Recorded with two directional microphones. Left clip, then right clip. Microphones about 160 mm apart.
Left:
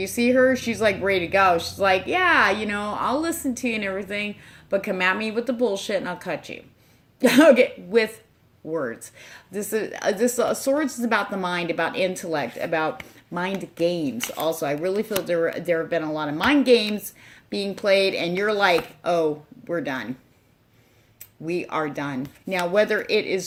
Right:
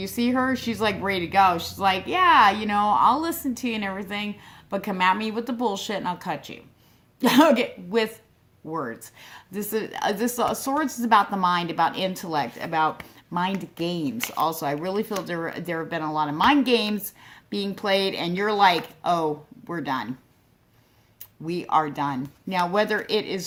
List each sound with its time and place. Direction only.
0.0 s a woman's voice: 30° right (ahead or behind)
21.6 s a woman's voice: 30° right (ahead or behind)